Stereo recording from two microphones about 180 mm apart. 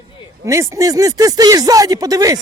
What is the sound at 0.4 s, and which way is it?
Speech, 15° right (ahead or behind).